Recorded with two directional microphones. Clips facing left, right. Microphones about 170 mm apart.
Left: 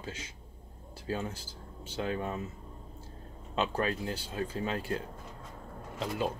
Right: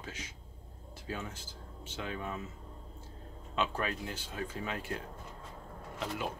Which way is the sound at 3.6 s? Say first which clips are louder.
Left 3 dB; 35° left (ahead or behind).